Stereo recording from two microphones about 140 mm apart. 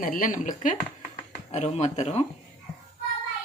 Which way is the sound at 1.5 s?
55° left (ahead or behind).